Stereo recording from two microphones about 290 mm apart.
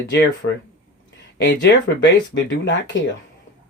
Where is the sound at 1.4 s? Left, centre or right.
Left.